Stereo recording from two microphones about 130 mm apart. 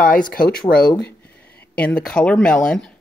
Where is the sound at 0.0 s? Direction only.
90° left.